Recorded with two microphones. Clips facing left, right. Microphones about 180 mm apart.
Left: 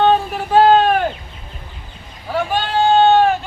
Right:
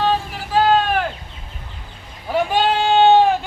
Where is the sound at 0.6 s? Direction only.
40° left (ahead or behind).